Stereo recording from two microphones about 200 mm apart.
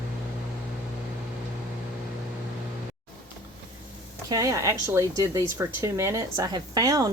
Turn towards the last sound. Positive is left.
turn(degrees=-20)  # may be behind; listen again after turning